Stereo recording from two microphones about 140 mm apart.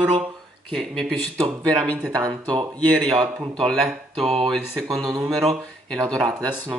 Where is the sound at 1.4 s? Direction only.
25° right (ahead or behind).